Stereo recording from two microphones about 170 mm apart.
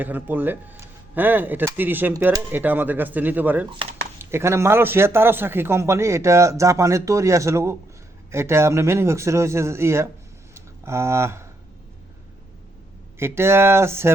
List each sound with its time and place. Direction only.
0.0 s speech: 10° right (ahead or behind)
10.5 s a sound: 15° right (ahead or behind)
13.1 s speech: 15° right (ahead or behind)